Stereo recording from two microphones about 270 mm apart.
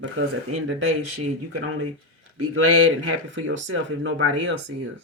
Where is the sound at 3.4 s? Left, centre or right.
Right.